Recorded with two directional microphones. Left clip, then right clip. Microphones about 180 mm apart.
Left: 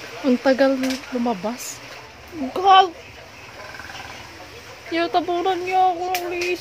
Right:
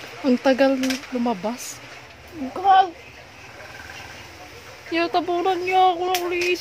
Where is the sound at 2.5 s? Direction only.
30° left (ahead or behind).